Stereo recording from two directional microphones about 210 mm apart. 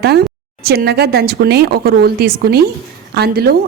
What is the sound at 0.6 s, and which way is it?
A woman's voice, 50° right (ahead or behind).